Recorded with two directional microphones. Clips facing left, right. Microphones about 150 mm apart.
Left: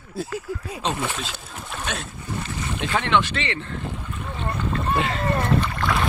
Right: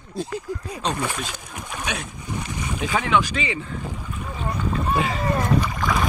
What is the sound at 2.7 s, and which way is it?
Speech, 5° right (ahead or behind).